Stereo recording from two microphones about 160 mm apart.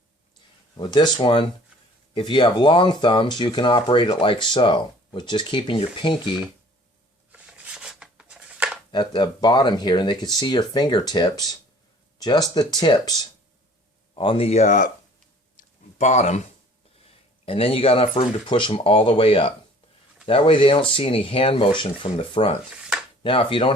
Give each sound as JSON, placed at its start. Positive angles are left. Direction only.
{"t": 0.8, "sound": "speech", "side_deg": 30}
{"t": 7.3, "sound": "a sound", "side_deg": -10}
{"t": 8.9, "sound": "speech", "side_deg": 25}
{"t": 14.2, "sound": "speech", "side_deg": 35}
{"t": 16.0, "sound": "speech", "side_deg": 45}
{"t": 17.4, "sound": "speech", "side_deg": 35}
{"t": 22.7, "sound": "a sound", "side_deg": -5}
{"t": 23.2, "sound": "speech", "side_deg": 35}